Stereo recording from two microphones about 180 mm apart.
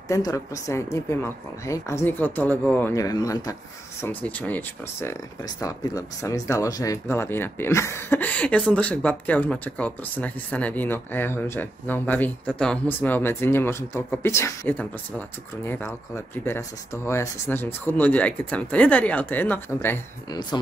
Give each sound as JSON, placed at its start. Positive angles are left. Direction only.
{"t": 0.1, "sound": "speech", "side_deg": 20}
{"t": 4.0, "sound": "speech", "side_deg": 10}